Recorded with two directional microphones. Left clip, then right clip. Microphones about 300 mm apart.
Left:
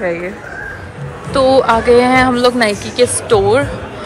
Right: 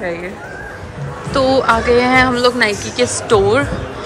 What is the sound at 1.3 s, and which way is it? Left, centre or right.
A woman's voice, centre.